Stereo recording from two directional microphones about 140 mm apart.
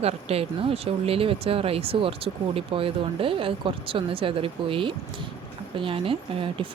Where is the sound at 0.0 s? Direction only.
45° right (ahead or behind).